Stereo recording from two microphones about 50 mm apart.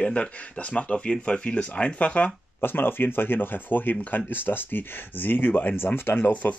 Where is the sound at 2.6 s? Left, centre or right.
Left.